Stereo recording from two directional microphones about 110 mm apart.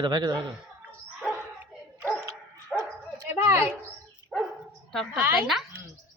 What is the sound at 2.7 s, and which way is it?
Dog, 10° left (ahead or behind).